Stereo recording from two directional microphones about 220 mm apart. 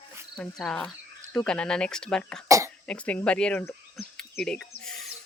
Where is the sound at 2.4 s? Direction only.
15° right (ahead or behind).